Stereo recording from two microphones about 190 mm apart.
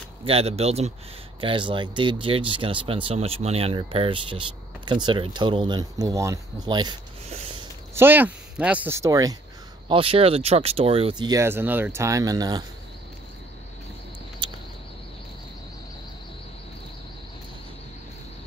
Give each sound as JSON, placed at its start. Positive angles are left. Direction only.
{"t": 0.2, "sound": "speech", "side_deg": -30}
{"t": 7.9, "sound": "speech", "side_deg": -10}
{"t": 9.8, "sound": "speech", "side_deg": -30}
{"t": 14.4, "sound": "a sound", "side_deg": -25}